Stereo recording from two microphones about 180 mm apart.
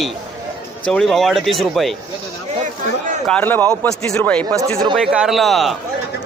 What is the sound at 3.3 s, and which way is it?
Speech, 10° left (ahead or behind).